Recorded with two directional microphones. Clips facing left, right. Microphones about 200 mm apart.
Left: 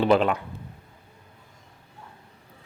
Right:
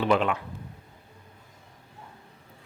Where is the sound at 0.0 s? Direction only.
35° left (ahead or behind).